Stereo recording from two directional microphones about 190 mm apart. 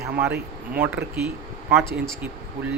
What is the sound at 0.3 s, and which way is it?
Speech, 55° right (ahead or behind).